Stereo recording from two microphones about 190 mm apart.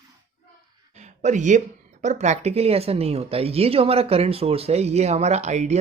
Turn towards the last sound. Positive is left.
turn(degrees=-35)  # may be behind; listen again after turning